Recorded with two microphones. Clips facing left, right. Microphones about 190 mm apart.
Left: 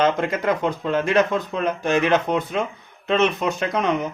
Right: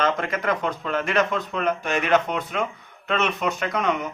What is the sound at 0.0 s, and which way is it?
A man's voice, 25° left (ahead or behind).